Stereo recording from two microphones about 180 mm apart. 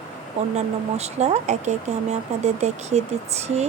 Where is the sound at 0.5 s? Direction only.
35° right (ahead or behind).